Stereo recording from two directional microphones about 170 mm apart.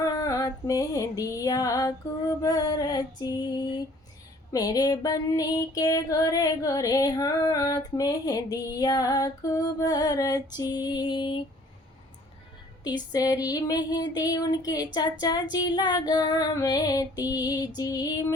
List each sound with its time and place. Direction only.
0.0 s music: 20° left (ahead or behind)
2.4 s female singing: 20° left (ahead or behind)
13.1 s female singing: 20° left (ahead or behind)